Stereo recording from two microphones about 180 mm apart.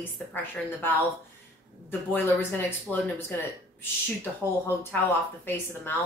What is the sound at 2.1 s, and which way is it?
Speech, 10° left (ahead or behind).